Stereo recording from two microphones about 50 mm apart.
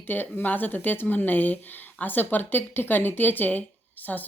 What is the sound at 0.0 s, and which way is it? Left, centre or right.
Speech, left.